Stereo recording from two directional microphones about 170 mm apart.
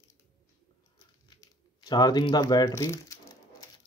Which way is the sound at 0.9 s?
25° left (ahead or behind).